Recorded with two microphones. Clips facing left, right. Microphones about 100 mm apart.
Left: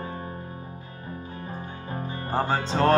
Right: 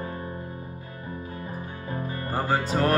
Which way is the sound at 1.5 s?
25° left (ahead or behind).